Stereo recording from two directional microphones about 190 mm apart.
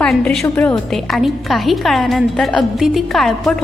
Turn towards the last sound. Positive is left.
turn(degrees=0)  # may be behind; listen again after turning